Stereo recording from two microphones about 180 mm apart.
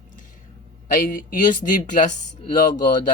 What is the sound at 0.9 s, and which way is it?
Speech, 50° left (ahead or behind).